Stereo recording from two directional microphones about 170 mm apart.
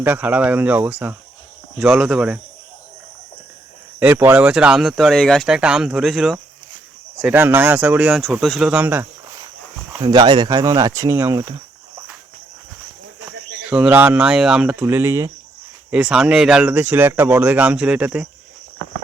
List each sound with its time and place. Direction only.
0.0 s speech: 10° right (ahead or behind)
4.0 s speech: 15° right (ahead or behind)
10.0 s speech: 25° right (ahead or behind)
13.7 s speech: 10° right (ahead or behind)